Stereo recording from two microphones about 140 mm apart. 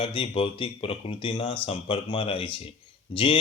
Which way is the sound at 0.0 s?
40° left (ahead or behind).